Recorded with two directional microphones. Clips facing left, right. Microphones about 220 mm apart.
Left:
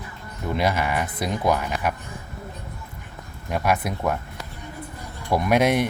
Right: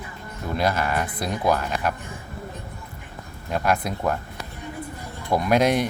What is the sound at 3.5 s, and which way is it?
Speech, 5° left (ahead or behind).